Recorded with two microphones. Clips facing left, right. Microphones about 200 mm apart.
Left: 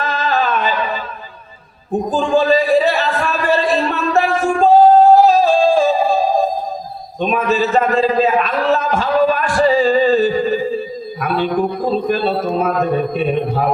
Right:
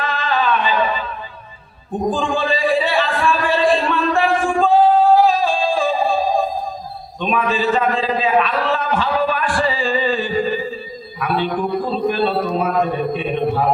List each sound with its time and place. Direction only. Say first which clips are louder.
0.0 s a sound: left 2 dB; 40° left (ahead or behind)
7.2 s a man's voice: left 3 dB; 45° left (ahead or behind)
11.9 s a man's voice: left 2 dB; 45° left (ahead or behind)